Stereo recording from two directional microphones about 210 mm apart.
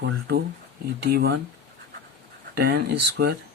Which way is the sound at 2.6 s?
50° right (ahead or behind).